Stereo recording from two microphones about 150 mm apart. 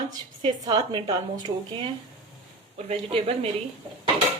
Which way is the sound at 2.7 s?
40° right (ahead or behind).